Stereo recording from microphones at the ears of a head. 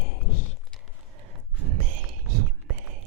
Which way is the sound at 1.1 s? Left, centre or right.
Right.